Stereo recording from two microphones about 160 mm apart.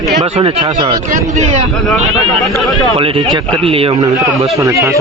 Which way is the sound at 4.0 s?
25° right (ahead or behind).